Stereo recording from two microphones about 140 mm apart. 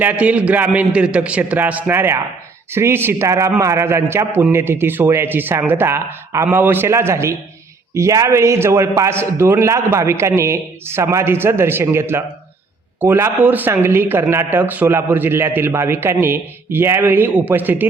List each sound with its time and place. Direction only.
0.0 s a man's voice: 10° right (ahead or behind)